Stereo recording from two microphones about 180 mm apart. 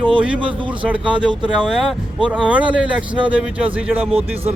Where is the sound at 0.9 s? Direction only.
5° right (ahead or behind).